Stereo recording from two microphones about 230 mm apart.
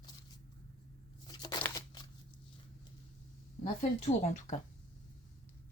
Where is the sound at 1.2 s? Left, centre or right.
Centre.